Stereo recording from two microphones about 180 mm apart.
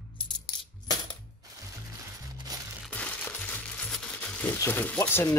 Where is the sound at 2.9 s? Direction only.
5° left (ahead or behind).